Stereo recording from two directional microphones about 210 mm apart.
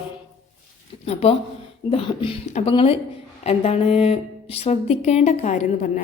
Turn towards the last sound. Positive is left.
turn(degrees=35)  # may be behind; listen again after turning